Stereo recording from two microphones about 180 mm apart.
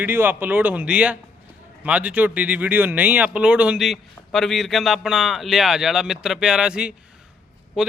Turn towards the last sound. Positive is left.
turn(degrees=-5)  # may be behind; listen again after turning